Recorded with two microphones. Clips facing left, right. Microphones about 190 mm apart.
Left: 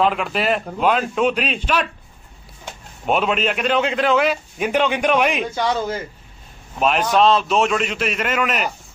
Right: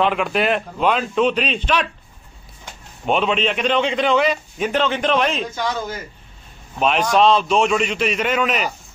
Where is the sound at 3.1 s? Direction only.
5° left (ahead or behind).